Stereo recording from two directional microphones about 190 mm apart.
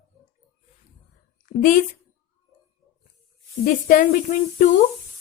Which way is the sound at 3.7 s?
45° left (ahead or behind).